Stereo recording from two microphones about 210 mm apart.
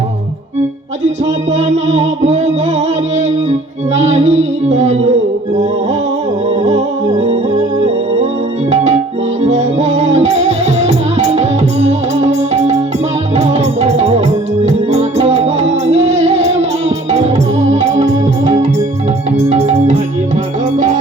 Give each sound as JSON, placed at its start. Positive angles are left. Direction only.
{"t": 1.0, "sound": "music", "side_deg": -30}
{"t": 3.9, "sound": "music", "side_deg": -30}
{"t": 6.6, "sound": "music", "side_deg": -30}
{"t": 8.7, "sound": "music", "side_deg": -35}
{"t": 19.5, "sound": "music", "side_deg": -30}